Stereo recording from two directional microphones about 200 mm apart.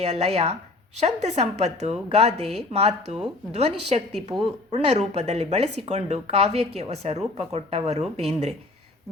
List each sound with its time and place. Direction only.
0.0 s speech: 30° right (ahead or behind)